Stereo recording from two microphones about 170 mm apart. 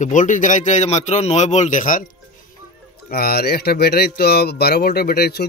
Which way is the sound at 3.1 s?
65° left (ahead or behind).